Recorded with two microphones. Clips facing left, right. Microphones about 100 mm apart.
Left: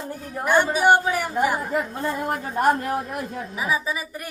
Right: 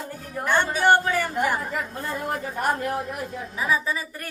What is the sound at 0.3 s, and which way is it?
Speech, 10° left (ahead or behind).